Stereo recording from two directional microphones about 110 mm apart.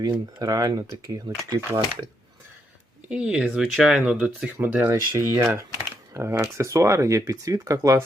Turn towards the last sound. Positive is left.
turn(degrees=-30)  # may be behind; listen again after turning